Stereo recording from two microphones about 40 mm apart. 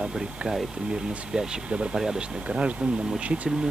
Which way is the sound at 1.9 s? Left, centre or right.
Centre.